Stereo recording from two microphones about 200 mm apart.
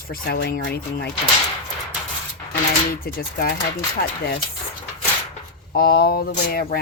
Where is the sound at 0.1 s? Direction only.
50° left (ahead or behind).